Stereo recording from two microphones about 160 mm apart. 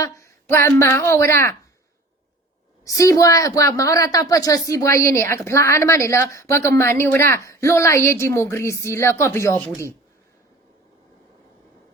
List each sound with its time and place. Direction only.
0.0 s a woman's voice: 15° left (ahead or behind)
2.8 s a woman's voice: 20° left (ahead or behind)